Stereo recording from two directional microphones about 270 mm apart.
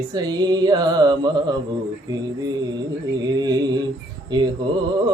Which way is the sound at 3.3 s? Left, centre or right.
Centre.